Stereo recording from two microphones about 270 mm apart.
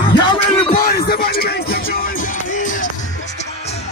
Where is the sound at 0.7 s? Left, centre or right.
Left.